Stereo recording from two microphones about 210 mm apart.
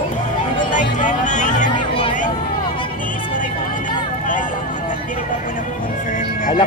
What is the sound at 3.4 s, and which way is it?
Vehicle, 40° left (ahead or behind).